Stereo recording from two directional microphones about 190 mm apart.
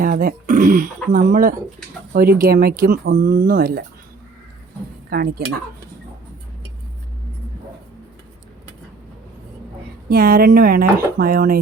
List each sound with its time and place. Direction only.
0.0 s speech: 50° right (ahead or behind)
3.2 s speech: 45° right (ahead or behind)
5.0 s speech: 55° right (ahead or behind)
10.1 s speech: 50° right (ahead or behind)